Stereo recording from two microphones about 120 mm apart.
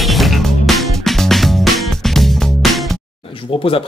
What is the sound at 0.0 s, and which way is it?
Music, centre (ahead or behind).